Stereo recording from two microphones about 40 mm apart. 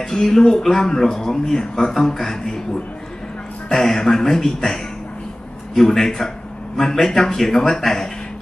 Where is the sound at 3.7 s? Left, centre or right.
Centre.